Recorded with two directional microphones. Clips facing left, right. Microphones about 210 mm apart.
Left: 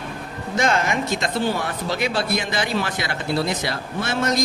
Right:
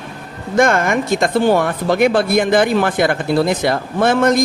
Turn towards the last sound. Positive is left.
turn(degrees=-55)  # may be behind; listen again after turning